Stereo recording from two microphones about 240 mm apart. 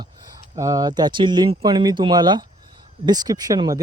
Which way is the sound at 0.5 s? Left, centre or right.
Centre.